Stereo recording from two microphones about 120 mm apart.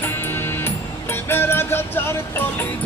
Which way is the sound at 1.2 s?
20° left (ahead or behind).